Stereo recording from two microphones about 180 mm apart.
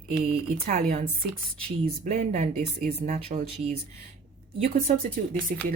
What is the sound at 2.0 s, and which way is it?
Speech, 45° right (ahead or behind).